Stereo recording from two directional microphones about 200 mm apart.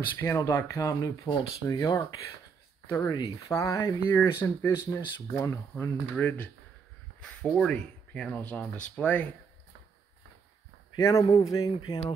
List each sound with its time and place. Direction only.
0.2 s speech: 15° left (ahead or behind)
11.0 s speech: 15° left (ahead or behind)